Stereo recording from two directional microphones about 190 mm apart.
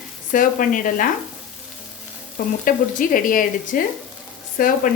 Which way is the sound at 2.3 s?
45° left (ahead or behind).